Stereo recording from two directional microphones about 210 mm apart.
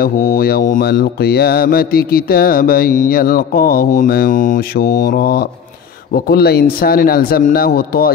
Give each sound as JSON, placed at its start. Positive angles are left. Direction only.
{"t": 0.0, "sound": "mantra", "side_deg": 40}